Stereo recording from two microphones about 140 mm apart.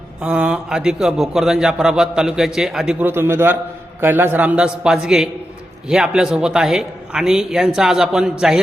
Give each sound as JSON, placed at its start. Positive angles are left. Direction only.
{"t": 0.2, "sound": "a man's voice", "side_deg": -10}
{"t": 3.1, "sound": "a man's voice", "side_deg": -15}